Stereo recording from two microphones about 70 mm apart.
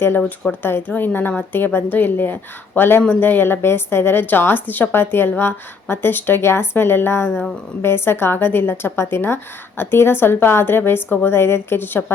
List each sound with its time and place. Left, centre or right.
0.6 s a woman's voice: left